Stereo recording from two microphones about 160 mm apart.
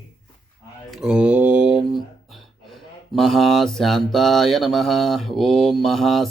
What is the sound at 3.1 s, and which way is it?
Mantra, centre (ahead or behind).